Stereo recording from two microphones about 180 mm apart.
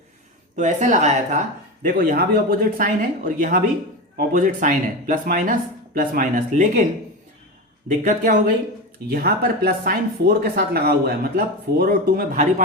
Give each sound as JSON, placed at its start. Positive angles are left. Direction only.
{"t": 0.5, "sound": "speech", "side_deg": -45}
{"t": 1.8, "sound": "speech", "side_deg": -55}
{"t": 7.9, "sound": "speech", "side_deg": -45}
{"t": 9.0, "sound": "speech", "side_deg": -60}